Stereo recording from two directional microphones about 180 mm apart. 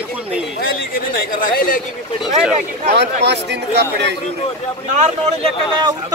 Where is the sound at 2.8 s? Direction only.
70° right (ahead or behind).